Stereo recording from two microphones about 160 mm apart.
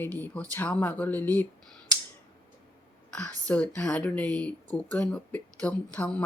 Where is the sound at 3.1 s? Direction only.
10° left (ahead or behind).